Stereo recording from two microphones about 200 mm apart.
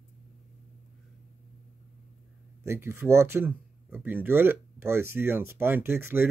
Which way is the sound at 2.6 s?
15° right (ahead or behind).